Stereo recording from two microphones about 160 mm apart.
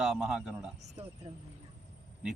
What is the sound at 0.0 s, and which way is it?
Speech, 5° right (ahead or behind).